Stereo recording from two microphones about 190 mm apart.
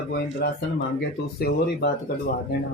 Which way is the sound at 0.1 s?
60° left (ahead or behind).